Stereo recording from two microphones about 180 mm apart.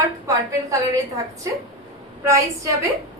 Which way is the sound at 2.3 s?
15° right (ahead or behind).